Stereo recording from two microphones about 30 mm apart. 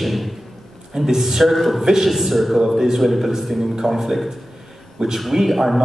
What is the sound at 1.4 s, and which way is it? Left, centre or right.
Speech, centre.